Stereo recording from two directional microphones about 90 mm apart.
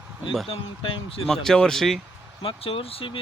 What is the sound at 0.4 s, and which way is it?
Speech, 75° left (ahead or behind).